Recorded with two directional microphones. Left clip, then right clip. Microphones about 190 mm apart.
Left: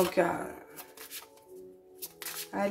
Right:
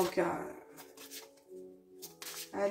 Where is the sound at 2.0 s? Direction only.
40° left (ahead or behind).